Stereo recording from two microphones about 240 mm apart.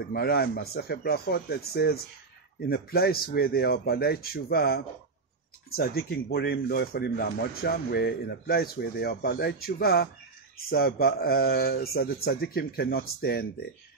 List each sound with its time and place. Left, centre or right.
0.1 s speech: left